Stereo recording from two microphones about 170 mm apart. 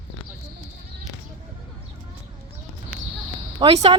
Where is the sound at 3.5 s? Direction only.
35° right (ahead or behind).